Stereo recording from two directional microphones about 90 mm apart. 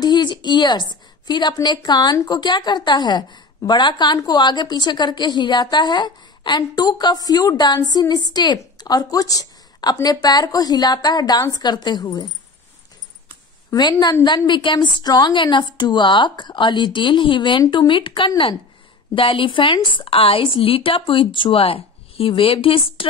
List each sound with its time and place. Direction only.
0.0 s a woman's voice: 50° left (ahead or behind)
13.7 s a woman's voice: 55° left (ahead or behind); by 23.0 s 85° left